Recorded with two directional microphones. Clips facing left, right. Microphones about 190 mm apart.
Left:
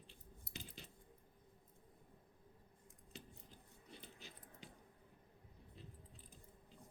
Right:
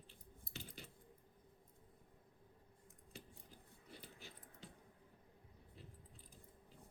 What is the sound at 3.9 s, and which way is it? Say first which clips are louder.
Dog: even; 20° left (ahead or behind).